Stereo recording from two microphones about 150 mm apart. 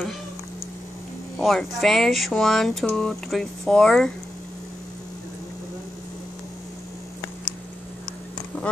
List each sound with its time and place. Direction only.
1.4 s speech: centre (ahead or behind)